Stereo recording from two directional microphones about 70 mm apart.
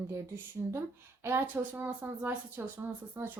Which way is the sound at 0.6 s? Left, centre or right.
Right.